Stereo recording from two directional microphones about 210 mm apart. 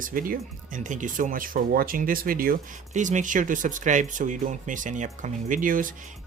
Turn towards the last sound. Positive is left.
turn(degrees=-40)  # may be behind; listen again after turning